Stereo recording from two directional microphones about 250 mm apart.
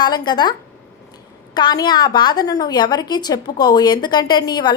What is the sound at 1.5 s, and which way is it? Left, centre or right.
A woman's voice, centre.